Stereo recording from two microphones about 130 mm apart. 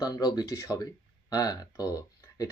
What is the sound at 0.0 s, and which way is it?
Speech, 30° left (ahead or behind).